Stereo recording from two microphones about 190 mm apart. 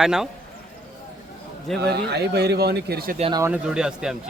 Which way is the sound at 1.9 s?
60° right (ahead or behind).